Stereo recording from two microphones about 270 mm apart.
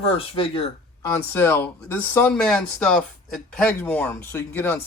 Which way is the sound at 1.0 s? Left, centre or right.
Centre.